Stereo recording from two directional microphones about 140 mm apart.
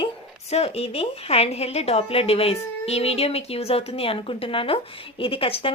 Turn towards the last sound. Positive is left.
turn(degrees=40)  # may be behind; listen again after turning